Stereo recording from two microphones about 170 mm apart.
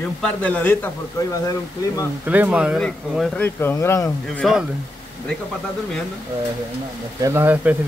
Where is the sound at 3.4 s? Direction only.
15° left (ahead or behind).